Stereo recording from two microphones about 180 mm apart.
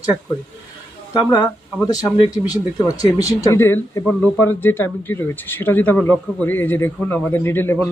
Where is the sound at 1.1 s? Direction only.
25° left (ahead or behind).